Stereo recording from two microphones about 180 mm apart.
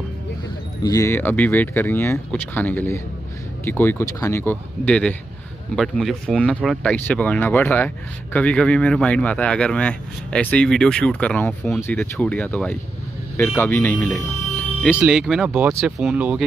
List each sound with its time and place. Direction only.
0.8 s speech: 15° left (ahead or behind); by 16.4 s 5° right (ahead or behind)